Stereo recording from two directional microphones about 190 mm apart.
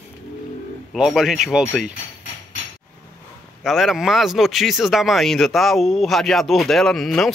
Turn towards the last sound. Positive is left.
turn(degrees=0)  # may be behind; listen again after turning